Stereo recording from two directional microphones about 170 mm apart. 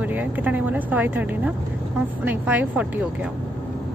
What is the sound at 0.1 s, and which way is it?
A woman's voice, 10° right (ahead or behind).